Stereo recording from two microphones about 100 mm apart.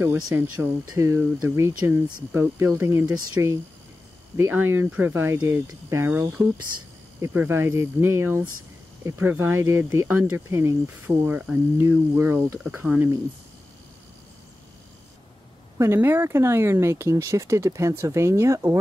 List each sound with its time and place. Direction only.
0.0 s speech: 25° right (ahead or behind)
15.8 s speech: 25° right (ahead or behind)